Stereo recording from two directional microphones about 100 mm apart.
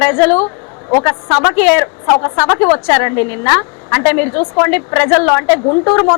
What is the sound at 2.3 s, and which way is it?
Speech, 20° left (ahead or behind).